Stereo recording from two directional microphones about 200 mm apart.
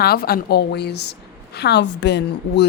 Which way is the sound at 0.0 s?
50° left (ahead or behind).